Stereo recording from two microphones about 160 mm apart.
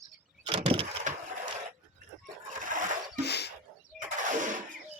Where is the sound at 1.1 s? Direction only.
50° right (ahead or behind).